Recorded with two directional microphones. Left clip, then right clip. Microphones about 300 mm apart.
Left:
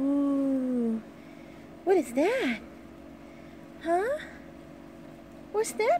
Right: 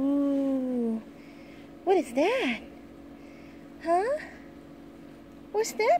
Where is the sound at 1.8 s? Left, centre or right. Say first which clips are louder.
Even; centre.